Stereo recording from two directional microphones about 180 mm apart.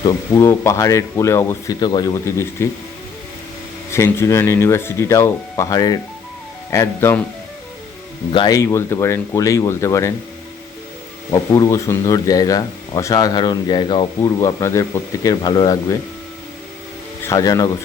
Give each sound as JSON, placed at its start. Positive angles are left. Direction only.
{"t": 0.0, "sound": "speech", "side_deg": 15}
{"t": 3.9, "sound": "speech", "side_deg": 15}
{"t": 8.3, "sound": "speech", "side_deg": 25}
{"t": 11.3, "sound": "speech", "side_deg": 20}
{"t": 17.2, "sound": "speech", "side_deg": 20}